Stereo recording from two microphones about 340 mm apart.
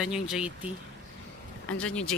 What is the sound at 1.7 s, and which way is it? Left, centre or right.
Speech, centre.